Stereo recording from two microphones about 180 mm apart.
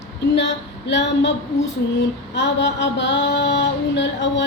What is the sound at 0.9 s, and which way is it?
Speech, 75° left (ahead or behind).